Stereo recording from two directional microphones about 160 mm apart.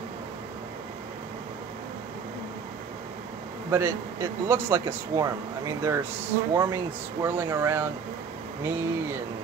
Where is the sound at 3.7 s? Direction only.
15° right (ahead or behind).